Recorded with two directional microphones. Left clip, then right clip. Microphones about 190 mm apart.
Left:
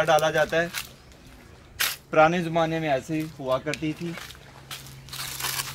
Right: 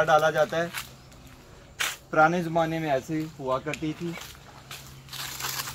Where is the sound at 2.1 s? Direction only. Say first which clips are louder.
Left 2 dB; 20° left (ahead or behind).